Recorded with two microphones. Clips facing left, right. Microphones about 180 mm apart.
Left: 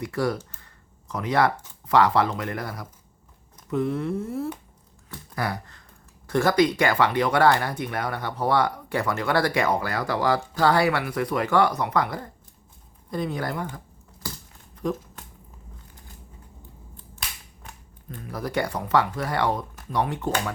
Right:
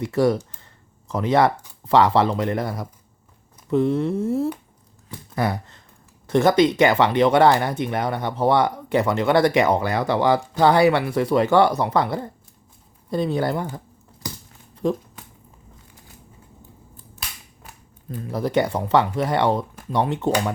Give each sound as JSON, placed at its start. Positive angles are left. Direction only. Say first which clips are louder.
{"t": 0.0, "sound": "speech", "louder": "right 7 dB", "side_deg": -25}
{"t": 14.2, "sound": "a sound", "louder": "right 3 dB", "side_deg": -15}
{"t": 14.8, "sound": "speech", "louder": "right 5 dB", "side_deg": -25}
{"t": 17.2, "sound": "cap gun", "louder": "even", "side_deg": -5}
{"t": 18.3, "sound": "speech", "louder": "right 6 dB", "side_deg": -25}